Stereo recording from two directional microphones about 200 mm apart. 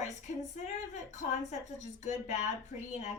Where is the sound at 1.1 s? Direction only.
35° left (ahead or behind).